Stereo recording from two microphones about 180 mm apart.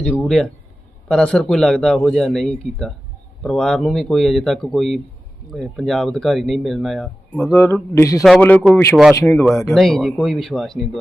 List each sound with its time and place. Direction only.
0.0 s speech: 5° left (ahead or behind)
7.5 s a man's voice: 15° left (ahead or behind)
8.2 s a man's voice: 5° left (ahead or behind)